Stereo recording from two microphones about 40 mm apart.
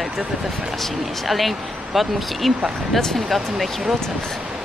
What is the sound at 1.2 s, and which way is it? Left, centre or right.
Speech, centre.